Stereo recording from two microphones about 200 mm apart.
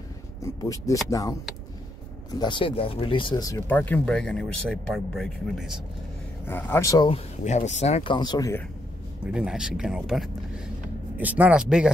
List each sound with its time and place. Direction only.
0.4 s speech: 15° left (ahead or behind)
2.3 s speech: 20° left (ahead or behind); by 5.8 s centre (ahead or behind)
6.4 s speech: 10° left (ahead or behind)
7.1 s speech: 35° left (ahead or behind); by 8.6 s 15° left (ahead or behind)
9.2 s speech: 5° right (ahead or behind)